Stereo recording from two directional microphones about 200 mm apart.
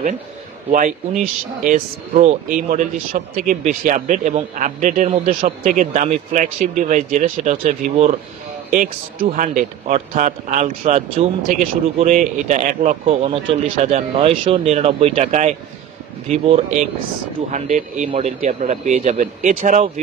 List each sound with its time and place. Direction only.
0.7 s speech: 40° right (ahead or behind)